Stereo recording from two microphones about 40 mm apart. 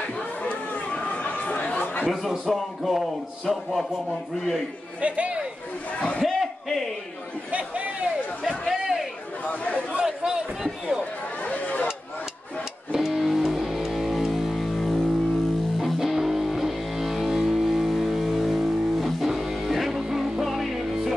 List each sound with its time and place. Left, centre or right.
0.4 s chatter: left
2.4 s speech: centre
5.0 s a man's voice: right
6.2 s a sound: centre
7.5 s a man's voice: right
8.5 s a sound: centre
9.4 s speech: left
10.0 s a sound: centre
11.4 s chatter: left
12.9 s music: centre